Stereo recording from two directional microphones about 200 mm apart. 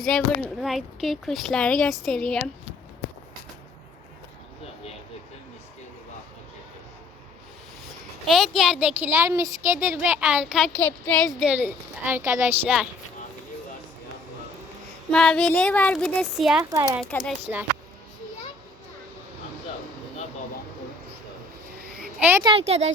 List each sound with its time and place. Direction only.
0.0 s speech: centre (ahead or behind)
8.3 s speech: centre (ahead or behind)
9.1 s speech: 15° right (ahead or behind)
15.1 s speech: 5° left (ahead or behind)
16.6 s speech: 15° right (ahead or behind)
17.0 s speech: 5° left (ahead or behind)
22.2 s speech: 10° right (ahead or behind)
22.4 s speech: 30° right (ahead or behind)